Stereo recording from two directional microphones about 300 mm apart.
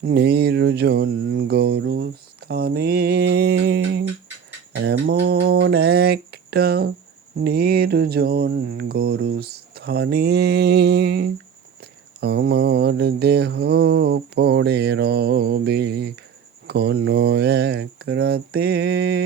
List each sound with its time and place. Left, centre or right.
0.0 s speech: right